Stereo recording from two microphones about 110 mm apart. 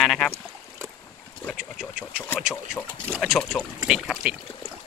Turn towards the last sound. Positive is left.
turn(degrees=-5)  # may be behind; listen again after turning